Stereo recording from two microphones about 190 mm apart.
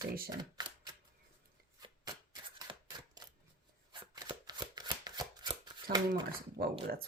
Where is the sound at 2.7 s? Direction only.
20° right (ahead or behind).